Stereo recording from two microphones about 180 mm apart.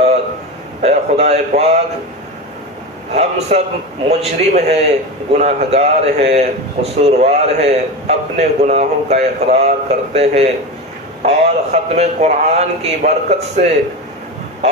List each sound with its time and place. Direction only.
0.8 s a man's voice: 35° right (ahead or behind)
3.2 s a man's voice: 35° right (ahead or behind)